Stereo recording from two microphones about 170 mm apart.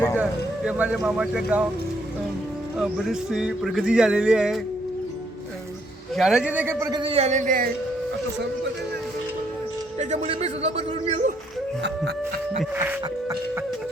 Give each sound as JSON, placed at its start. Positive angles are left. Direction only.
{"t": 0.2, "sound": "speech", "side_deg": -10}
{"t": 2.7, "sound": "speech", "side_deg": -5}
{"t": 6.1, "sound": "a man's voice", "side_deg": 0}
{"t": 7.0, "sound": "a man's voice", "side_deg": -35}
{"t": 10.0, "sound": "a man's voice", "side_deg": -40}
{"t": 12.7, "sound": "a man's voice", "side_deg": -10}